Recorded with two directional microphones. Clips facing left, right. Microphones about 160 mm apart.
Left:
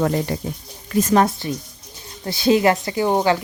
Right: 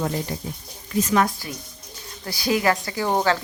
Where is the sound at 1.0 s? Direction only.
40° left (ahead or behind).